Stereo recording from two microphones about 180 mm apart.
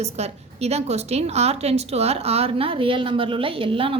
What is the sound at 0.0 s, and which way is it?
A woman's voice, 35° right (ahead or behind).